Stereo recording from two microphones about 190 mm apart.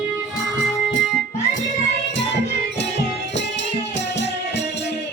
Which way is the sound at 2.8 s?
65° left (ahead or behind).